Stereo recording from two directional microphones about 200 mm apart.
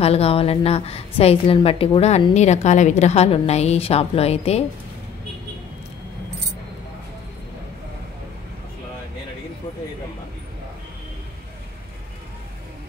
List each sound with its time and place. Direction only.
0.0 s a woman's voice: 30° left (ahead or behind)